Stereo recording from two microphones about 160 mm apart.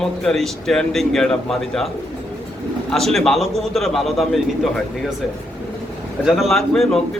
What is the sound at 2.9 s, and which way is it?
Speech, centre (ahead or behind).